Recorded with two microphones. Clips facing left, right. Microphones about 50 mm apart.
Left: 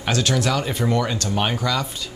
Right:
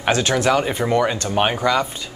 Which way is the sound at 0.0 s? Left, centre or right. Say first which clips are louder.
Right 4 dB; right.